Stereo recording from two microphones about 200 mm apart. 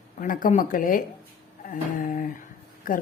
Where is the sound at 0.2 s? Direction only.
45° left (ahead or behind).